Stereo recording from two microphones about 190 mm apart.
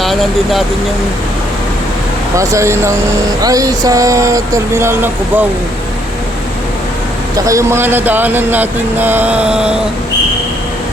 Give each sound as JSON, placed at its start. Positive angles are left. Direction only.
{"t": 0.0, "sound": "speech", "side_deg": 0}
{"t": 2.3, "sound": "speech", "side_deg": -15}
{"t": 7.3, "sound": "speech", "side_deg": -15}